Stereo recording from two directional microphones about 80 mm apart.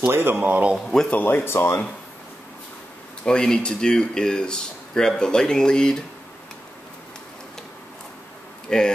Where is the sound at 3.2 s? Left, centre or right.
Centre.